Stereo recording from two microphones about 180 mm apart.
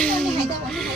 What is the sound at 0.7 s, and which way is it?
Music, centre (ahead or behind).